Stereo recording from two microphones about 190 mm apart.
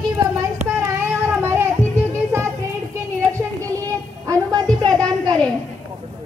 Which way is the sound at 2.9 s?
15° right (ahead or behind).